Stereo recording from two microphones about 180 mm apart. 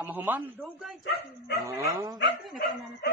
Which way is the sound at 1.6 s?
15° right (ahead or behind).